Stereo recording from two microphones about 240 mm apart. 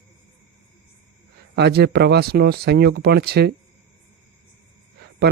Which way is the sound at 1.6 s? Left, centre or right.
Right.